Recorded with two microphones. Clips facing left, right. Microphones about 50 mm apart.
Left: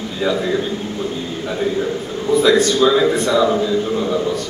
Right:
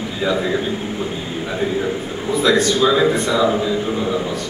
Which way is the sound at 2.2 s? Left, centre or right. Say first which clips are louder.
Left 3 dB; centre.